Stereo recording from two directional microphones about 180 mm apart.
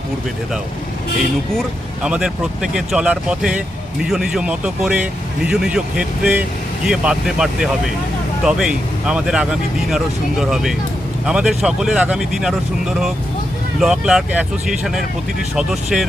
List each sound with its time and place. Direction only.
1.5 s speech: 5° right (ahead or behind)